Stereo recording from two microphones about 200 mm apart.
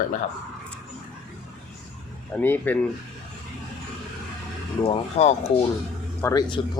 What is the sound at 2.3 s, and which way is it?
Speech, 10° left (ahead or behind).